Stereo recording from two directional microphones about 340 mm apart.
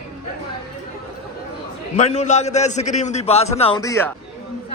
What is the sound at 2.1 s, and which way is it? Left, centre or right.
A man's voice, centre.